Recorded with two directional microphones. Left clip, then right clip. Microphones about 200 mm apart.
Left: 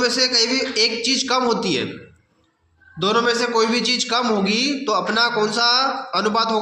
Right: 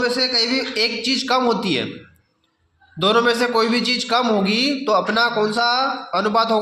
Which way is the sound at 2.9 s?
35° right (ahead or behind).